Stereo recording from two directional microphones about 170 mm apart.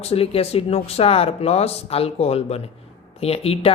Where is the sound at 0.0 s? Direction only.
35° left (ahead or behind).